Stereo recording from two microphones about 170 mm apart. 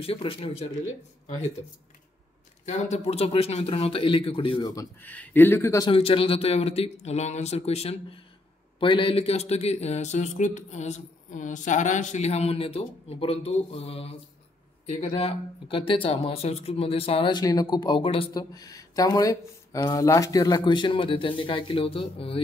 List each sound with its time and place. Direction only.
0.0 s speech: 35° left (ahead or behind)
2.6 s speech: 40° left (ahead or behind)
5.0 s speech: 10° left (ahead or behind)
5.9 s speech: 35° left (ahead or behind)